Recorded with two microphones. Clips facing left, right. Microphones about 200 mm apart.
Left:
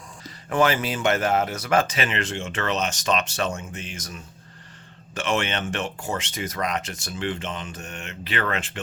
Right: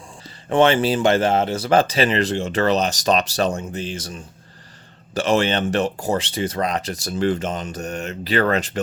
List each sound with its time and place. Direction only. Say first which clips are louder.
0.4 s speech: right 6 dB; 30° right (ahead or behind)